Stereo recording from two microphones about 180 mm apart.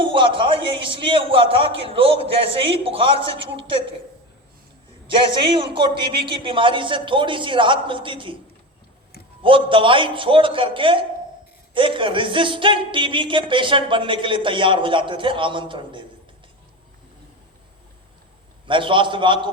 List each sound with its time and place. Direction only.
0.0 s a man's voice: 30° right (ahead or behind)
5.0 s speech: 30° right (ahead or behind)
9.4 s speech: 30° right (ahead or behind)
18.6 s speech: 25° right (ahead or behind)